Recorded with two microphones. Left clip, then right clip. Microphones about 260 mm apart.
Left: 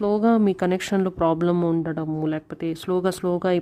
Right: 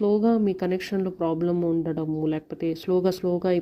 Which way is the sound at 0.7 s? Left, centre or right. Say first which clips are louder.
Left 4 dB; left.